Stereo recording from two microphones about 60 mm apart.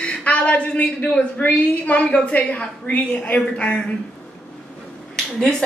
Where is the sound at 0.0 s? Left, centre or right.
Centre.